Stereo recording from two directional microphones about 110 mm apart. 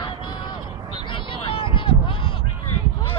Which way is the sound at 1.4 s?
55° left (ahead or behind).